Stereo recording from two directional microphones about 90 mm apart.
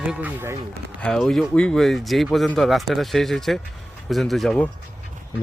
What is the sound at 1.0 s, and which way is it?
Speech, 5° left (ahead or behind).